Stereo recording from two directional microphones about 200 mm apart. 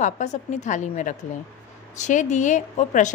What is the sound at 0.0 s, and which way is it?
A woman's voice, 35° left (ahead or behind).